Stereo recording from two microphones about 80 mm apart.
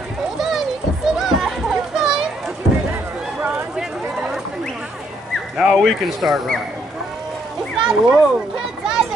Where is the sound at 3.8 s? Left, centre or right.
Centre.